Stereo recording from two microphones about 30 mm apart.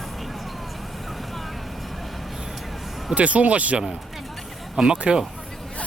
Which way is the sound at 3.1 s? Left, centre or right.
Right.